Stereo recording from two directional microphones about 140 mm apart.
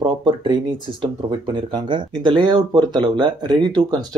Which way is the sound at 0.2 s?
35° right (ahead or behind).